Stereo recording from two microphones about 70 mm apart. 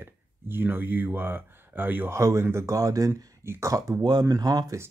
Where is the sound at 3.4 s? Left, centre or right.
Right.